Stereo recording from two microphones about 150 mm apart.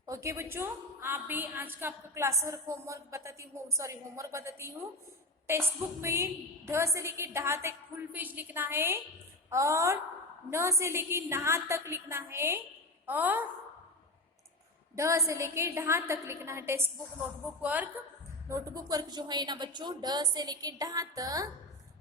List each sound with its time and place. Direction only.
0.0 s a woman's voice: 20° right (ahead or behind)
14.9 s a woman's voice: 20° right (ahead or behind)
18.4 s a woman's voice: 20° right (ahead or behind)